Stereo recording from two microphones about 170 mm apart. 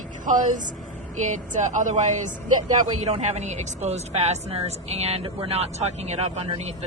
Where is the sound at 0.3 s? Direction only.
50° right (ahead or behind).